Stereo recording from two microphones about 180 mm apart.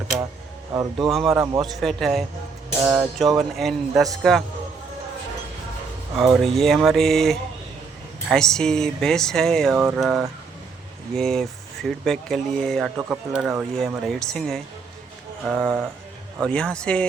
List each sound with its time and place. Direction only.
0.7 s speech: 20° right (ahead or behind)
1.3 s speech: centre (ahead or behind)
6.1 s speech: centre (ahead or behind)